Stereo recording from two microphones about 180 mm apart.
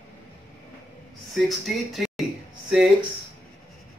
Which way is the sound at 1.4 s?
Centre (ahead or behind).